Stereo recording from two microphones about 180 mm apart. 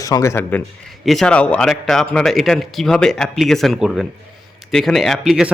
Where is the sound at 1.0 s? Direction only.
Centre (ahead or behind).